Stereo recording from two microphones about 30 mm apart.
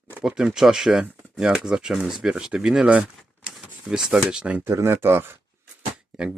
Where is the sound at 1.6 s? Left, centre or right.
Right.